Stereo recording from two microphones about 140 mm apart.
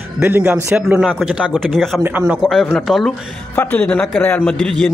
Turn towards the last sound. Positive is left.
turn(degrees=5)  # may be behind; listen again after turning